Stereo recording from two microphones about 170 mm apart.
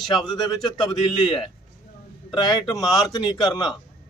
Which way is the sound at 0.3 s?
25° left (ahead or behind).